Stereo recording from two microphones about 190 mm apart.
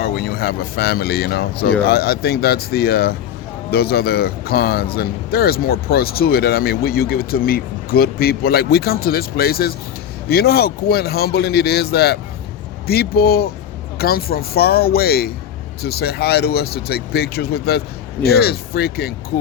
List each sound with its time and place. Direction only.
0.0 s speech: 55° left (ahead or behind)